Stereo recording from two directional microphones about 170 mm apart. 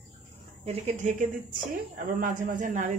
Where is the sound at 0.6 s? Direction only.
40° right (ahead or behind).